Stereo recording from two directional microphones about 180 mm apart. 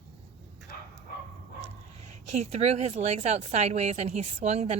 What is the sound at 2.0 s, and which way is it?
A woman's voice, 40° right (ahead or behind).